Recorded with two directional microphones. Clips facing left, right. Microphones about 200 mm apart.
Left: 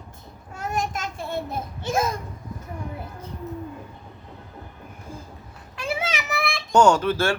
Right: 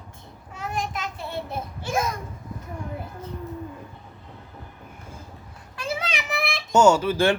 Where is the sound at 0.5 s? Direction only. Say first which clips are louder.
Left 2 dB; 45° left (ahead or behind).